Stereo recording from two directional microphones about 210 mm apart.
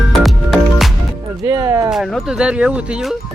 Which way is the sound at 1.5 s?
15° right (ahead or behind).